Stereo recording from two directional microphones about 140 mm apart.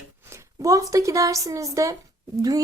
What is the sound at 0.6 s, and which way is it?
Speech, 25° right (ahead or behind).